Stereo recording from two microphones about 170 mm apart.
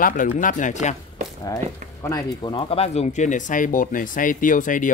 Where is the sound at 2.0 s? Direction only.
20° left (ahead or behind).